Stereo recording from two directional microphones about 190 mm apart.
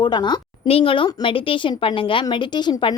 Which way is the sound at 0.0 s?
25° left (ahead or behind).